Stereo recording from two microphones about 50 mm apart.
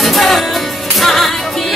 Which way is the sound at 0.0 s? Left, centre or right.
Centre.